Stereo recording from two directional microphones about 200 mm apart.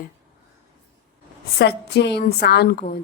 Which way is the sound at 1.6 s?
55° left (ahead or behind).